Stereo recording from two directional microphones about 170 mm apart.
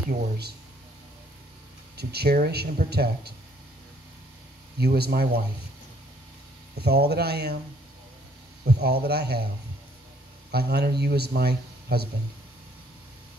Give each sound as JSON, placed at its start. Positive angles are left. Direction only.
{"t": 2.0, "sound": "speech", "side_deg": -70}
{"t": 4.7, "sound": "speech", "side_deg": -70}
{"t": 6.8, "sound": "speech", "side_deg": -70}
{"t": 8.6, "sound": "speech", "side_deg": -70}
{"t": 10.5, "sound": "speech", "side_deg": -70}